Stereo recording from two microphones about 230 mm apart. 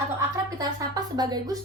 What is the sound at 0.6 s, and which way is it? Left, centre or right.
Speech, centre.